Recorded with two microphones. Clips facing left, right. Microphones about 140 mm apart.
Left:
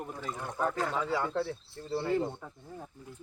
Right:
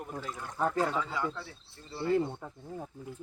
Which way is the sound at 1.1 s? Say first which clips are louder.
Left 5 dB; 60° left (ahead or behind).